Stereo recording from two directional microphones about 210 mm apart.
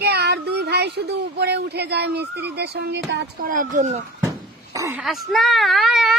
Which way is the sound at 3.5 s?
40° right (ahead or behind).